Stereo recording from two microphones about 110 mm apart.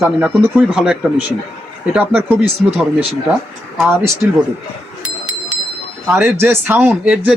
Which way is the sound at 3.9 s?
20° right (ahead or behind).